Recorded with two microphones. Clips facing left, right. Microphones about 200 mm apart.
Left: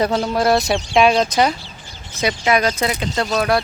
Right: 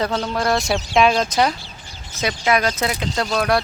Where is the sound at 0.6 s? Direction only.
Centre (ahead or behind).